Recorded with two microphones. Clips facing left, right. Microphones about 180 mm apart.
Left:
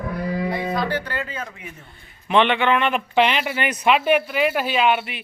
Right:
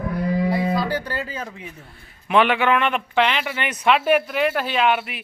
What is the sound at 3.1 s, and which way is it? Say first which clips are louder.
Speech: left 3 dB; 15° left (ahead or behind).